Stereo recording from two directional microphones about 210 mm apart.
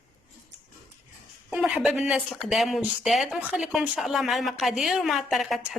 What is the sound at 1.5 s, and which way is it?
Speech, 5° right (ahead or behind).